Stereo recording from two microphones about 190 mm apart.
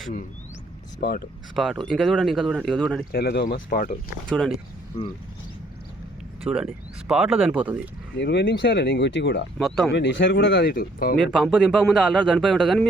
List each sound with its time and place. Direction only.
1.0 s speech: 60° left (ahead or behind)
1.5 s a man's voice: centre (ahead or behind)
3.1 s speech: 55° left (ahead or behind)
4.3 s a man's voice: centre (ahead or behind)
6.4 s a man's voice: 5° right (ahead or behind)
8.1 s speech: 65° left (ahead or behind)
9.6 s a man's voice: centre (ahead or behind)
9.9 s speech: 70° left (ahead or behind); by 11.2 s 50° left (ahead or behind)
11.3 s a man's voice: centre (ahead or behind)